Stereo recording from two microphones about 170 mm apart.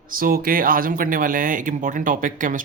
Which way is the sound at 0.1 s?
60° right (ahead or behind).